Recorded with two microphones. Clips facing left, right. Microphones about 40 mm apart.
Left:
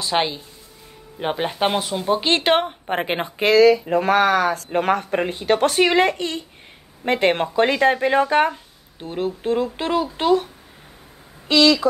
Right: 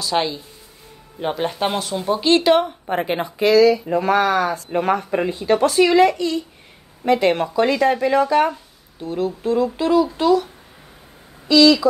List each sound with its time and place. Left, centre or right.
0.0 s a woman's voice: left